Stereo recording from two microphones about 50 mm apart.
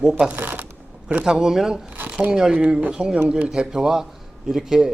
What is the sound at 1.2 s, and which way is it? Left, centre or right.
Speech, centre.